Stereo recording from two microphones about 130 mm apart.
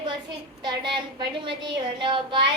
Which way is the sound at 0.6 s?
35° right (ahead or behind).